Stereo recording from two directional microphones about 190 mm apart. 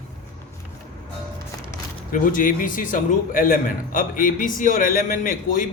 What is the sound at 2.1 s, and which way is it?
A man's voice, 45° left (ahead or behind).